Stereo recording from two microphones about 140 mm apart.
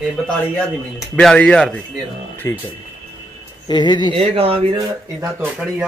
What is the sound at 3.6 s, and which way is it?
Speech, 30° left (ahead or behind).